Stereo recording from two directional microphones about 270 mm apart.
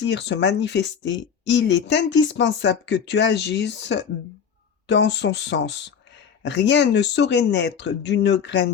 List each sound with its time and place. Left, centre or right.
0.0 s speech: left